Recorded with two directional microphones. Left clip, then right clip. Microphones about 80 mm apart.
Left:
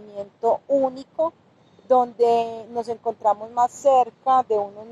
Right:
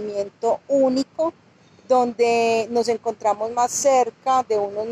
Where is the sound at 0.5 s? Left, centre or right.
Right.